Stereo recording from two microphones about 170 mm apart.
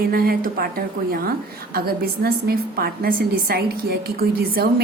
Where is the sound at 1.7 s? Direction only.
60° right (ahead or behind).